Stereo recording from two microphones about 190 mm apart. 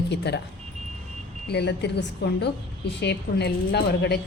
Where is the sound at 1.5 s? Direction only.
60° left (ahead or behind).